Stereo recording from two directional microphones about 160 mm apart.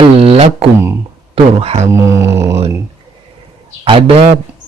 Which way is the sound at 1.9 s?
15° right (ahead or behind).